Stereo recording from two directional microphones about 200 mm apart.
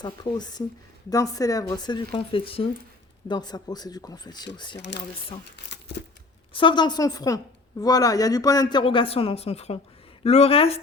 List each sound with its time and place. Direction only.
0.0 s a woman's voice: 20° left (ahead or behind)
6.5 s a woman's voice: 25° left (ahead or behind)